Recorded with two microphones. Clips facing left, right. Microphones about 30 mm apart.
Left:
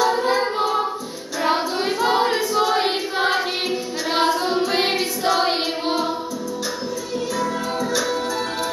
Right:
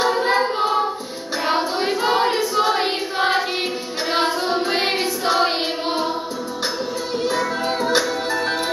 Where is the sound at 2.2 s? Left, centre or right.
Centre.